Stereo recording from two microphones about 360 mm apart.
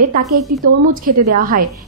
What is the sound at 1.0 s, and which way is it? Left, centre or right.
Speech, right.